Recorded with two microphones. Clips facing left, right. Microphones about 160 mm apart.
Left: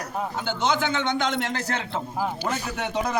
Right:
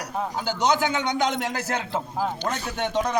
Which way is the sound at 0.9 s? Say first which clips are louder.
Even; 10° right (ahead or behind).